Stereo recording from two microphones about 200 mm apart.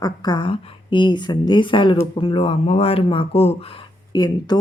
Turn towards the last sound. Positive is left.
turn(degrees=20)  # may be behind; listen again after turning